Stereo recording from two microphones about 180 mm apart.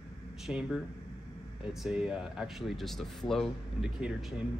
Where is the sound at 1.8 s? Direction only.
5° right (ahead or behind).